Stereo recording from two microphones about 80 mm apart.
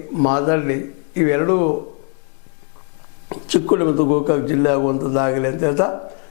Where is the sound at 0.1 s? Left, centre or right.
Left.